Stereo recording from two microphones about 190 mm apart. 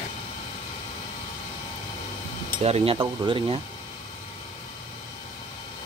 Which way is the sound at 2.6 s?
30° right (ahead or behind).